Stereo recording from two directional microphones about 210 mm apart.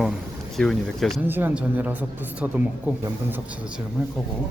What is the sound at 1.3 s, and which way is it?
A woman's voice, 10° right (ahead or behind).